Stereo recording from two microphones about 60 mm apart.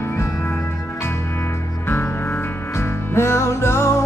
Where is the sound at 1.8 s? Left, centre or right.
Left.